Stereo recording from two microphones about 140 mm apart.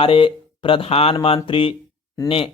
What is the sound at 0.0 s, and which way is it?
Speech, 40° left (ahead or behind).